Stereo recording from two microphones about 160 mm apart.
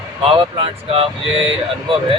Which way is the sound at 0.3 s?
35° right (ahead or behind).